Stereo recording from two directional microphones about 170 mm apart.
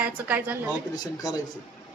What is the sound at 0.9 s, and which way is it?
Speech, 20° left (ahead or behind).